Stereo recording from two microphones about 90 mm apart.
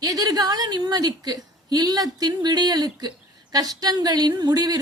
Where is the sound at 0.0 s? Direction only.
40° right (ahead or behind).